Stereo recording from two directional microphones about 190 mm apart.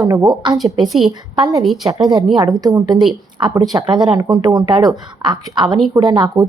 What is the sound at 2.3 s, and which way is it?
Speech, 20° right (ahead or behind).